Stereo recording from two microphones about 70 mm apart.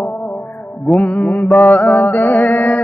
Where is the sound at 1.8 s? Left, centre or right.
Left.